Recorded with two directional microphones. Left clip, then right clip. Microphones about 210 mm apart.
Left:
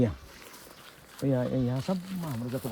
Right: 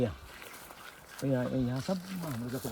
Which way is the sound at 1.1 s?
45° left (ahead or behind).